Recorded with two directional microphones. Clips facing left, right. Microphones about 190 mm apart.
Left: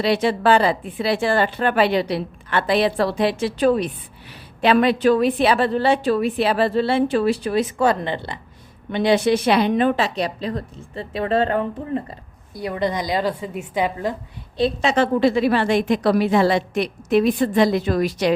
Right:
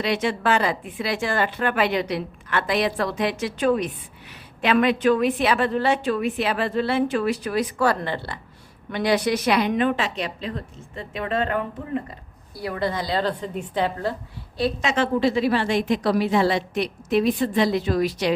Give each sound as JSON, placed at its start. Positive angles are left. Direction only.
{"t": 0.0, "sound": "speech", "side_deg": 35}
{"t": 12.5, "sound": "a woman's voice", "side_deg": 20}
{"t": 14.6, "sound": "speech", "side_deg": 30}
{"t": 15.2, "sound": "a woman's voice", "side_deg": 55}